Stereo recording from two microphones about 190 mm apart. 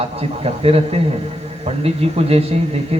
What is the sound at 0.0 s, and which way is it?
Speech, 30° right (ahead or behind).